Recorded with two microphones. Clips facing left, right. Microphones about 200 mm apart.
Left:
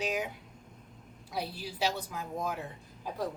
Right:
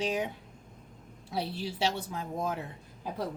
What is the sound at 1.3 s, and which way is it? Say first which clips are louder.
Speech: right 3 dB; 25° right (ahead or behind).